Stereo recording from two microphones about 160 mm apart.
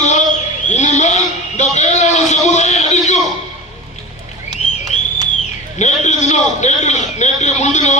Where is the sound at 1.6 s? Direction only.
45° left (ahead or behind).